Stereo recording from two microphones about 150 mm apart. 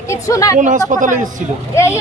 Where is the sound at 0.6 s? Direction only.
55° right (ahead or behind).